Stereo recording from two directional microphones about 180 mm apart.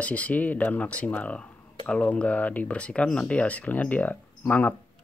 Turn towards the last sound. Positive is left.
turn(degrees=10)  # may be behind; listen again after turning